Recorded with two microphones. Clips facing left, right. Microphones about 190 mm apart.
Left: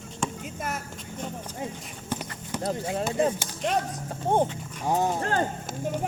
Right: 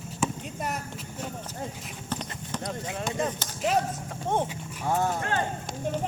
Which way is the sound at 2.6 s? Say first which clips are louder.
Left 7 dB; 30° left (ahead or behind).